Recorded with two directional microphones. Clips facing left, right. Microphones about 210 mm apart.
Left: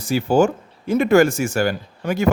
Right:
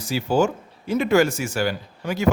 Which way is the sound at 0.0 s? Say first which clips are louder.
Left 4 dB; 50° left (ahead or behind).